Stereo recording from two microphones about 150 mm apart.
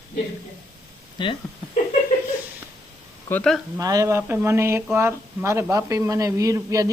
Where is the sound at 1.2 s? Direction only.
30° left (ahead or behind).